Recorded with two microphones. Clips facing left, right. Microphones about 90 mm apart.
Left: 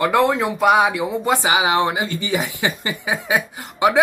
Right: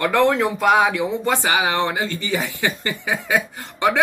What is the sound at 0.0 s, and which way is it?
Speech, 10° left (ahead or behind).